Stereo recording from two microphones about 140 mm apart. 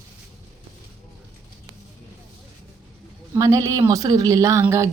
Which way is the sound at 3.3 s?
20° right (ahead or behind).